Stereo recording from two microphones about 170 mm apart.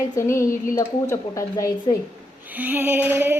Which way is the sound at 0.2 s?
15° left (ahead or behind).